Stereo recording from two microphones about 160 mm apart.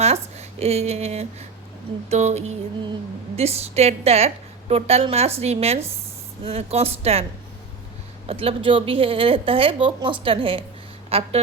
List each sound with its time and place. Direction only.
0.0 s a woman's voice: 40° right (ahead or behind)
2.0 s a sound: 45° right (ahead or behind)
3.3 s speech: 40° right (ahead or behind)
8.3 s speech: 35° right (ahead or behind)